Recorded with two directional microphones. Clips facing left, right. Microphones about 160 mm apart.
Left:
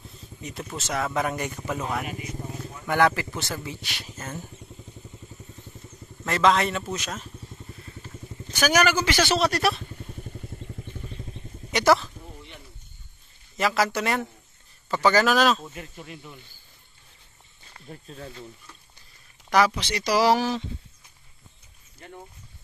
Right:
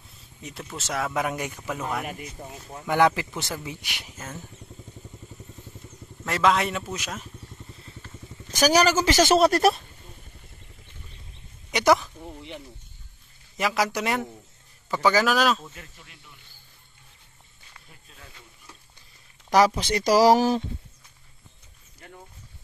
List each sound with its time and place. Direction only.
0.4 s speech: centre (ahead or behind)
2.9 s speech: 15° right (ahead or behind)
6.2 s speech: 5° right (ahead or behind)
8.5 s a woman's voice: 35° right (ahead or behind)
11.7 s a sound: 15° right (ahead or behind)
13.6 s speech: 10° right (ahead or behind)
17.7 s speech: 40° left (ahead or behind)
19.5 s speech: 35° right (ahead or behind)